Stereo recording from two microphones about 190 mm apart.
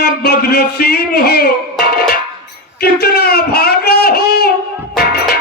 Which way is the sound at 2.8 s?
55° left (ahead or behind).